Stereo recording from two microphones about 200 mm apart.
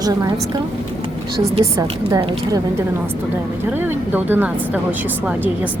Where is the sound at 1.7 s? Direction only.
20° right (ahead or behind).